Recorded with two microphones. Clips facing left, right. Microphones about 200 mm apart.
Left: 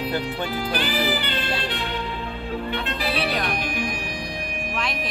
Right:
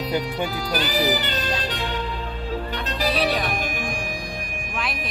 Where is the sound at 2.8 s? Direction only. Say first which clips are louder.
Right 2 dB; 40° right (ahead or behind).